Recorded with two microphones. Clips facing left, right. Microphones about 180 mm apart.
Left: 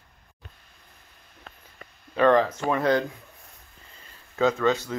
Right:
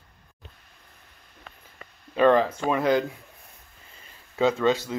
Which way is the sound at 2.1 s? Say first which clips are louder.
Even; 20° right (ahead or behind).